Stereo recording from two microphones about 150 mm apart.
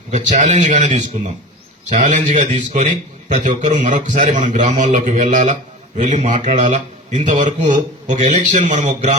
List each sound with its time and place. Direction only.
0.1 s a man's voice: 55° right (ahead or behind)